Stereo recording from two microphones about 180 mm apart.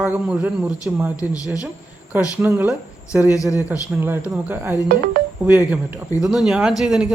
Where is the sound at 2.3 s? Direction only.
15° right (ahead or behind).